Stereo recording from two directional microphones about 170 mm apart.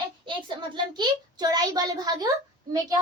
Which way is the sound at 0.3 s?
25° right (ahead or behind).